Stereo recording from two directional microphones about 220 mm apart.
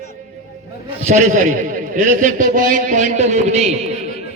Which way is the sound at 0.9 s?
30° right (ahead or behind).